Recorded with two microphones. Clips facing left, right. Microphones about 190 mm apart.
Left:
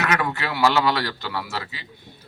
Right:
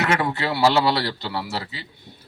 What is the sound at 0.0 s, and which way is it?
Speech, 25° right (ahead or behind).